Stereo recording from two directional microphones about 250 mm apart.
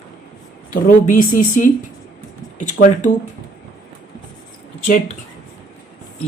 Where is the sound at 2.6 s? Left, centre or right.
Left.